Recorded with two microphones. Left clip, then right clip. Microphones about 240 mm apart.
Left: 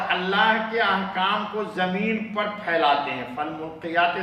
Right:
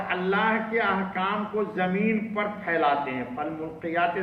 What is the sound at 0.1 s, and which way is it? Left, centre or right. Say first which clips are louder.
A man's voice: left 4 dB; left.